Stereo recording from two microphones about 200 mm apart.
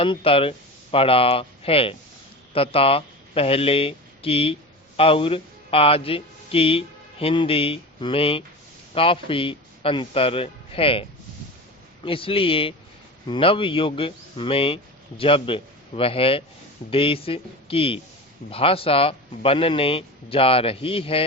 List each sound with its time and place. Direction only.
0.0 s a man's voice: 25° left (ahead or behind)
12.0 s speech: 25° left (ahead or behind)